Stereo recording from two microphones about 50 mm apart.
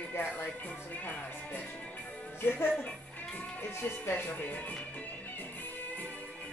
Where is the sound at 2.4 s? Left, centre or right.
Left.